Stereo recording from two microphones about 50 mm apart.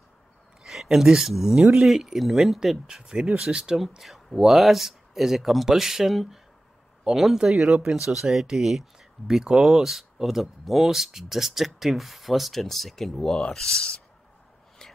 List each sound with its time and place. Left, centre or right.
0.7 s speech: centre
13.4 s speech: centre